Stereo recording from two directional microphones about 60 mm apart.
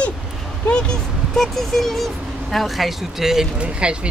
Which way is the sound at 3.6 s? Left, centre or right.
Centre.